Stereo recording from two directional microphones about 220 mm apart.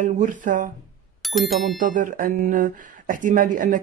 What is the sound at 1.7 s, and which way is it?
Speech, 35° right (ahead or behind).